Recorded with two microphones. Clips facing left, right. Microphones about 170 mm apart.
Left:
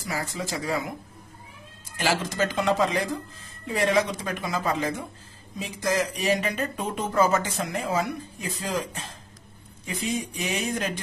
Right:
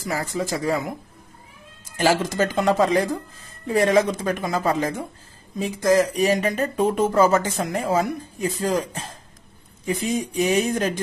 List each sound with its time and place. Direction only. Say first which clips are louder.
0.1 s speech: right 5 dB; 45° right (ahead or behind)
2.0 s speech: right 5 dB; 45° right (ahead or behind)